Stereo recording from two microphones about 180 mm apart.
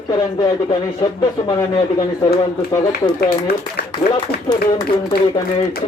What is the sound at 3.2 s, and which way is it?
Speech, 60° left (ahead or behind).